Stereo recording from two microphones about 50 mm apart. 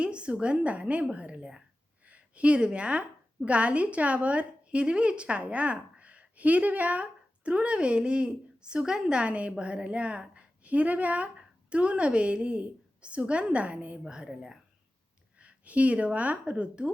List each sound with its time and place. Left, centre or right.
0.0 s a woman's voice: right
14.0 s speech: centre
15.4 s speech: right